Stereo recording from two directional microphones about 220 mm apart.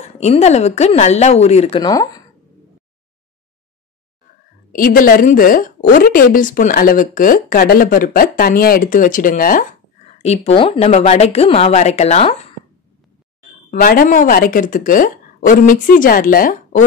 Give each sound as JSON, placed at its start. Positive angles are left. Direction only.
{"t": 0.0, "sound": "a woman's voice", "side_deg": 30}
{"t": 4.7, "sound": "a woman's voice", "side_deg": 40}
{"t": 13.7, "sound": "a woman's voice", "side_deg": 40}